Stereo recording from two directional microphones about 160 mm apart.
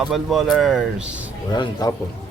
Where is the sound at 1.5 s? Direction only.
25° left (ahead or behind).